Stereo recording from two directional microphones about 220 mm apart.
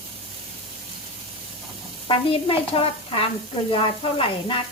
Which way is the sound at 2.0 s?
25° left (ahead or behind).